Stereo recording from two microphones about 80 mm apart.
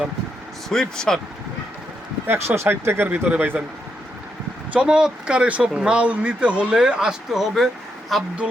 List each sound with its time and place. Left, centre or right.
0.7 s speech: centre
2.2 s speech: right
4.7 s speech: centre